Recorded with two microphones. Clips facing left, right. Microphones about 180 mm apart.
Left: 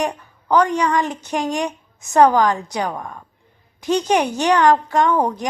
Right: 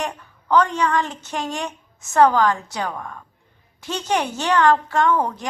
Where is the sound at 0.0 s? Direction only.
15° left (ahead or behind).